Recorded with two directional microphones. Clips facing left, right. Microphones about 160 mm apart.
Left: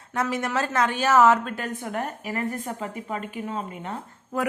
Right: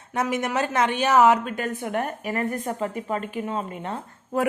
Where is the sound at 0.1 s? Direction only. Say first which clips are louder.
Right 1 dB; 20° right (ahead or behind).